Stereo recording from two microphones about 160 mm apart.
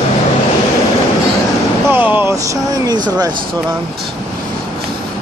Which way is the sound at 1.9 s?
10° right (ahead or behind).